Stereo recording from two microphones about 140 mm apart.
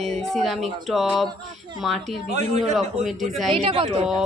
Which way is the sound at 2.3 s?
50° right (ahead or behind).